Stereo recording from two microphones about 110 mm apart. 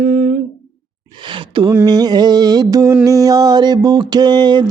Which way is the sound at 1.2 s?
50° right (ahead or behind).